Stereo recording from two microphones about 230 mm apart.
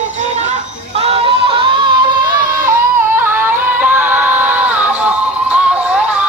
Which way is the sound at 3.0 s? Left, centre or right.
Centre.